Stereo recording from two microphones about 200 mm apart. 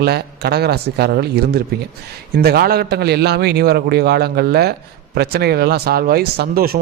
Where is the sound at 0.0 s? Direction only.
55° right (ahead or behind).